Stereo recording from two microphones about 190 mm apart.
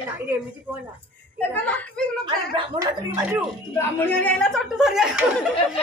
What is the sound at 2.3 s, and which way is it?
Speech, 20° right (ahead or behind).